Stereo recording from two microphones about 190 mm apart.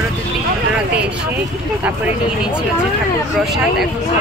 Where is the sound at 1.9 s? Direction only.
5° right (ahead or behind).